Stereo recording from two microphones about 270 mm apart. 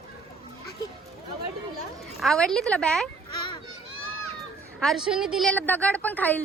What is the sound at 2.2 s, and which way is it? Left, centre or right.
Speech, centre.